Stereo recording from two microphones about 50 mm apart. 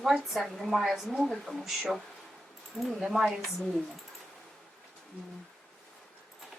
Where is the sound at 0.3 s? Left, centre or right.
Centre.